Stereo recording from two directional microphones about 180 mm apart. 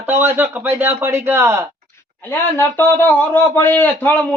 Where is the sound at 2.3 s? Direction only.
15° left (ahead or behind).